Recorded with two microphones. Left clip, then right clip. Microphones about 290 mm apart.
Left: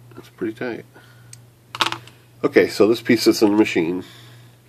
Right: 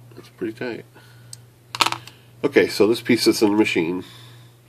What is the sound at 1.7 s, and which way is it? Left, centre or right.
Computer keyboard, centre.